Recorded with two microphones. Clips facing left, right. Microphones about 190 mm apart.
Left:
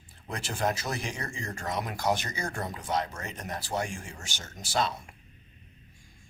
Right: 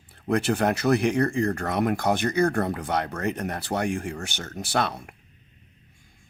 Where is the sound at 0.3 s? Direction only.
60° right (ahead or behind).